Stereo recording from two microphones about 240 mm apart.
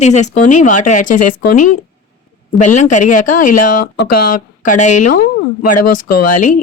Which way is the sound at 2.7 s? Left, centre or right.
Left.